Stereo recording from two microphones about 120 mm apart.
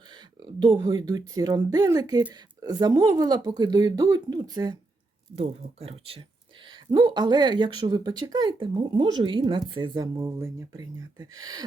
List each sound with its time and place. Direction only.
0.1 s speech: 40° right (ahead or behind)
5.3 s speech: 55° right (ahead or behind)
6.7 s speech: 40° right (ahead or behind)